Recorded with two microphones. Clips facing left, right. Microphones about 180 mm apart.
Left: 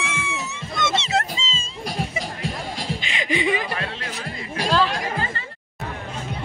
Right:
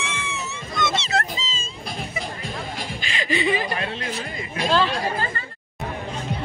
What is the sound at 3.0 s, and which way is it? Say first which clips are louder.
Chuckle: right 1 dB; 15° left (ahead or behind).